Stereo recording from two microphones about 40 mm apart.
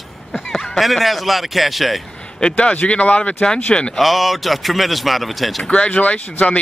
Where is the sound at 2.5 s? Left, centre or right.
Left.